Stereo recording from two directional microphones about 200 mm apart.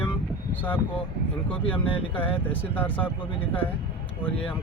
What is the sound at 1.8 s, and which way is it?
Speech, 25° left (ahead or behind).